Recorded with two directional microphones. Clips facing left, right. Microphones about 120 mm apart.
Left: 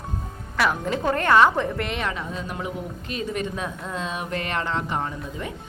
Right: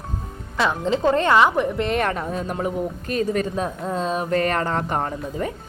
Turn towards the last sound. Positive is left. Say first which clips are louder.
# right 5 dB
turn(degrees=-40)  # may be behind; listen again after turning